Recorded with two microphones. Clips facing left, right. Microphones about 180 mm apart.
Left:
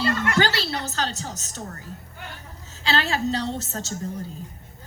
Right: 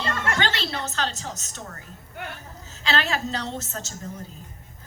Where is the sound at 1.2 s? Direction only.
35° left (ahead or behind).